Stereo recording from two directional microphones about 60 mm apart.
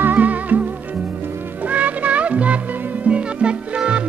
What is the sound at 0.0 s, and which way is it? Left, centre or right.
Music, right.